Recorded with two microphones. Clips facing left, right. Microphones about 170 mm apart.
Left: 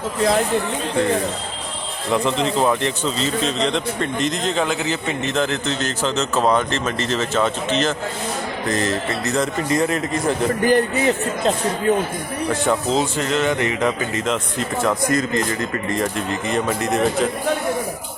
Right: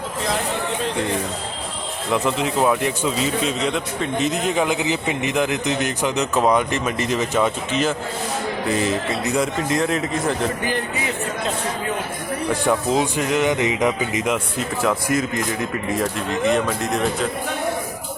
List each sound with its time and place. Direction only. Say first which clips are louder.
2.1 s speech: left 1 dB; 5° right (ahead or behind)
9.6 s speech: left 1 dB; centre (ahead or behind)
10.6 s speech: left 8 dB; 45° left (ahead or behind)
12.6 s speech: right 1 dB; 10° right (ahead or behind)